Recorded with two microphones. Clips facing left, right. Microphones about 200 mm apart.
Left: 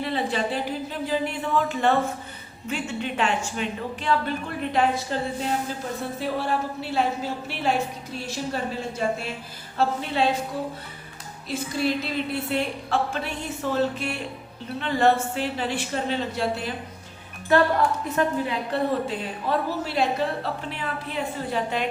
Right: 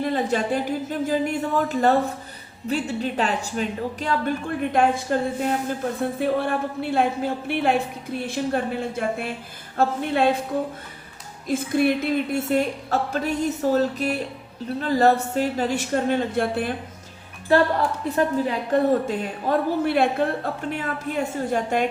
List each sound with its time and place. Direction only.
0.0 s a woman's voice: 45° right (ahead or behind)
11.4 s a woman's voice: 55° right (ahead or behind)
18.1 s a woman's voice: 40° right (ahead or behind)